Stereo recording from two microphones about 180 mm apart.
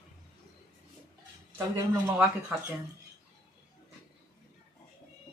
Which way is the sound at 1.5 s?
20° right (ahead or behind).